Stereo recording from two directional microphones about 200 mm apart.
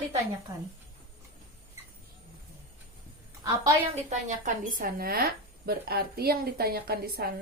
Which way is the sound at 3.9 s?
35° right (ahead or behind).